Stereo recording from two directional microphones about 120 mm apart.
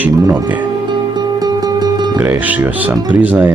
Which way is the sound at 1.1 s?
35° right (ahead or behind).